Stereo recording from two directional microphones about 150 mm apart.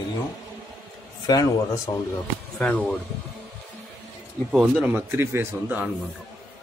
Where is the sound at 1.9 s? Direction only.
30° left (ahead or behind).